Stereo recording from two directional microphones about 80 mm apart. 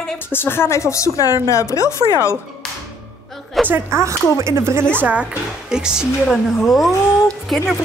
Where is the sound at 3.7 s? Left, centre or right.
Right.